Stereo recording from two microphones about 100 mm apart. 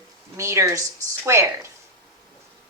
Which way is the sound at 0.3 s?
25° right (ahead or behind).